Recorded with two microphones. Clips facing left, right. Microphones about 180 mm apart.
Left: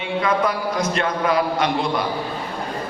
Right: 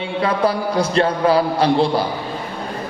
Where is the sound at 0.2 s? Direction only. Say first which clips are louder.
Right 3 dB; 30° right (ahead or behind).